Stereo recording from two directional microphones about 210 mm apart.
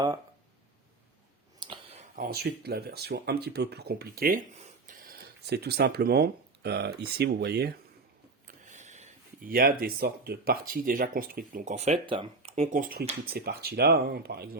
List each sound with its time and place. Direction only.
1.5 s clicking: 25° right (ahead or behind)
2.1 s speech: 45° right (ahead or behind)
8.4 s speech: 35° right (ahead or behind)
12.7 s speech: 45° right (ahead or behind)